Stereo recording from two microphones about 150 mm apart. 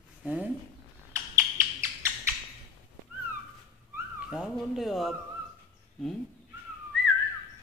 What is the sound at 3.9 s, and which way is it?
Speech, 5° right (ahead or behind).